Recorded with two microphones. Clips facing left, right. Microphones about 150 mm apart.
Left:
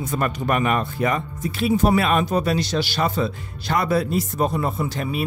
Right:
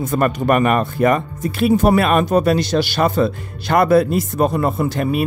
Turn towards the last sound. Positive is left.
turn(degrees=-55)  # may be behind; listen again after turning